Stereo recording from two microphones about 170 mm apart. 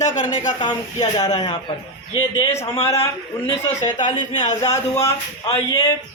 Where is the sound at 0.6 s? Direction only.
25° left (ahead or behind).